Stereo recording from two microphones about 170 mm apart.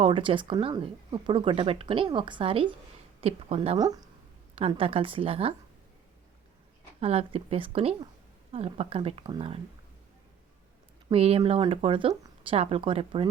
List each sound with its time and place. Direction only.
0.0 s speech: 30° right (ahead or behind)
3.8 s speech: 20° right (ahead or behind)
4.5 s speech: 35° right (ahead or behind)
7.0 s speech: 35° right (ahead or behind)
11.1 s speech: 35° right (ahead or behind)